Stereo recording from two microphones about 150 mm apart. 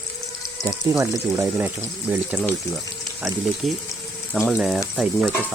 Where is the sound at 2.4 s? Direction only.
5° left (ahead or behind).